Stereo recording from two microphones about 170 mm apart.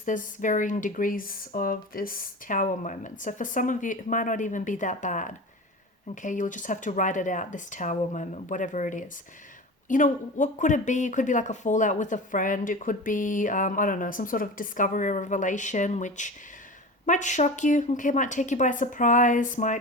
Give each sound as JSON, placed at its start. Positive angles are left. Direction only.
{"t": 0.0, "sound": "speech", "side_deg": 50}